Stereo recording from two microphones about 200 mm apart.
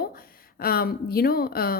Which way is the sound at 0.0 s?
50° left (ahead or behind).